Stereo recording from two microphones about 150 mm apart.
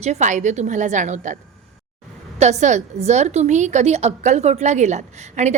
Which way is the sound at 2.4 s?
50° right (ahead or behind).